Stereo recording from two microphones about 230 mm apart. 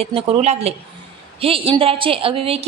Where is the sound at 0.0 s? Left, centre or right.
Right.